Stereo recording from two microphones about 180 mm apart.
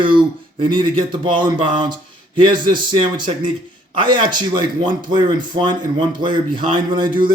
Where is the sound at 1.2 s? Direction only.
25° right (ahead or behind).